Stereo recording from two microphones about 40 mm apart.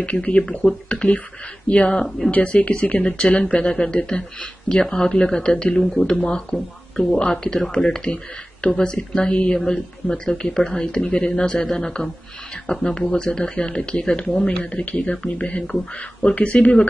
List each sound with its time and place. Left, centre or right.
0.0 s speech: left
2.0 s speech: centre
2.3 s speech: left
6.5 s speech: centre
7.2 s speech: centre
14.3 s speech: centre
14.6 s speech: left
16.3 s speech: left